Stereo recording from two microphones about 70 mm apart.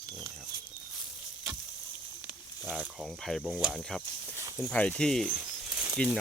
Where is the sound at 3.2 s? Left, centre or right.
Centre.